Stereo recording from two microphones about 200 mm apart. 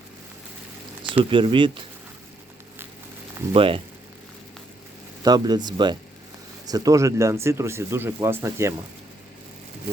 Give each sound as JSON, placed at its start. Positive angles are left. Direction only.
{"t": 1.1, "sound": "speech", "side_deg": -25}
{"t": 3.5, "sound": "speech", "side_deg": -25}
{"t": 5.2, "sound": "speech", "side_deg": -20}